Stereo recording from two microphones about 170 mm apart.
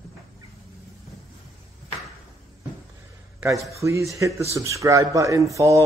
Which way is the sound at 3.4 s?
15° right (ahead or behind).